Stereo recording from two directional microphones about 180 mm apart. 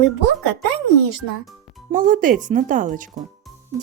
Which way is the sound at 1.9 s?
45° right (ahead or behind).